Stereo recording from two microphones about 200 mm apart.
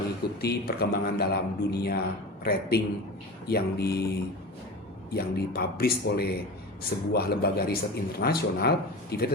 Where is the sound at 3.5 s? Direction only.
50° left (ahead or behind).